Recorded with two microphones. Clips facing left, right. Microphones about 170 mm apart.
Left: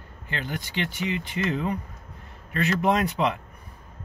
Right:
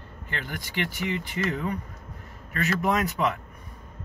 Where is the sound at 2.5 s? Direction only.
30° left (ahead or behind).